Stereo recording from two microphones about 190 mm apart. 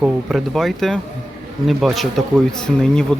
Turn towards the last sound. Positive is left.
turn(degrees=5)  # may be behind; listen again after turning